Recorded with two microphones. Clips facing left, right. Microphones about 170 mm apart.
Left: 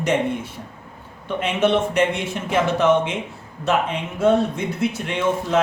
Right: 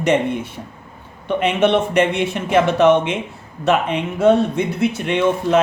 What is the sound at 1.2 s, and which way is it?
Speech, 65° right (ahead or behind).